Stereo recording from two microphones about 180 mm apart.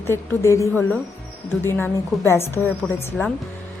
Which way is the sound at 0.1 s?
15° left (ahead or behind).